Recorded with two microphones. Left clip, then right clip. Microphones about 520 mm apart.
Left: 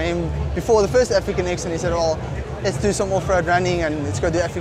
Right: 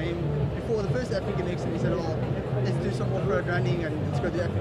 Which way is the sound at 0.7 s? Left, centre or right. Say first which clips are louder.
Left 14 dB; left.